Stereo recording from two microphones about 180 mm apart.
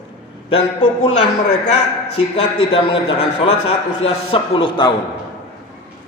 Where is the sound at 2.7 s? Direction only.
30° left (ahead or behind).